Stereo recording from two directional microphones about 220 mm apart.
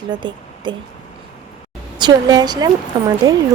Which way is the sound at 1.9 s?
20° right (ahead or behind).